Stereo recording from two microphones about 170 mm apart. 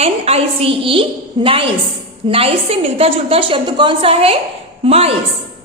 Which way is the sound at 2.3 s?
35° right (ahead or behind).